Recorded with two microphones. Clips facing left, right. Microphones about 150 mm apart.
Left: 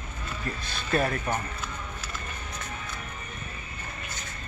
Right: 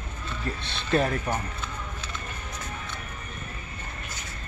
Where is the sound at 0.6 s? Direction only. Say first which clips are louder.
Right 2 dB; 25° right (ahead or behind).